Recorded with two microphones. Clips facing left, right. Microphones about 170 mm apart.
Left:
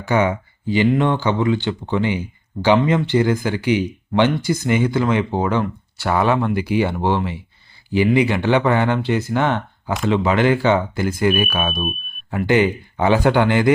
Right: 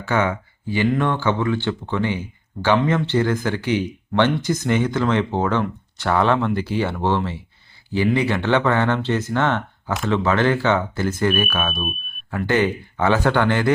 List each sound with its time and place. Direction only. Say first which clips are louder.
0.0 s speech: left 3 dB; 15° left (ahead or behind)